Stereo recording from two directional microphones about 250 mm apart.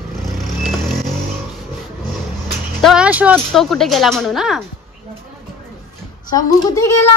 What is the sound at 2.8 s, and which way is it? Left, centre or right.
A child's voice, centre.